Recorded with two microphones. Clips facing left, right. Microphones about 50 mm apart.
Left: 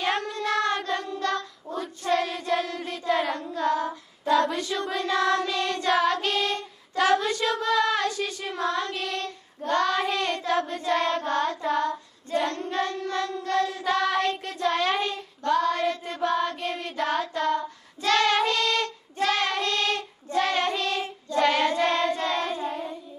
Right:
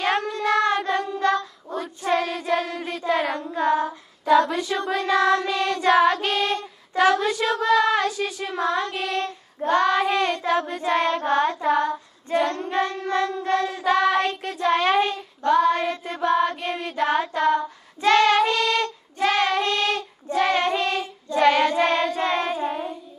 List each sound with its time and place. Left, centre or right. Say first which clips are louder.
0.0 s child singing: right 4 dB; centre
3.8 s child singing: right 3 dB; centre
5.0 s child singing: right 4 dB; right; by 8.6 s centre
8.6 s child singing: right 3 dB; right
18.4 s music: right 3 dB; centre
19.2 s child singing: right 4 dB; right